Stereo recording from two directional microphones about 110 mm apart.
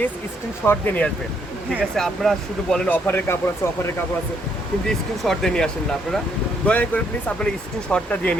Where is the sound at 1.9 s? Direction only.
5° left (ahead or behind); by 3.7 s 20° left (ahead or behind).